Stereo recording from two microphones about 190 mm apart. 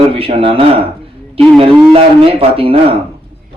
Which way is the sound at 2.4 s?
30° right (ahead or behind).